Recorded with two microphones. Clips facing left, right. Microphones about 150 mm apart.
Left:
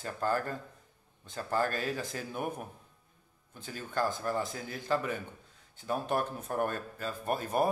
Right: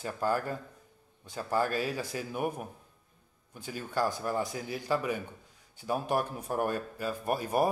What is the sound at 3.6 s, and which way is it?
A man's voice, 10° right (ahead or behind).